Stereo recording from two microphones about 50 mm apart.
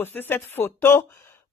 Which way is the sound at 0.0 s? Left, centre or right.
Left.